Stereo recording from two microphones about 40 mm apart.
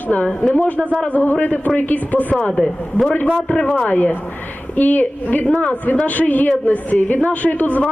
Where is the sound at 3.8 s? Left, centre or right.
Left.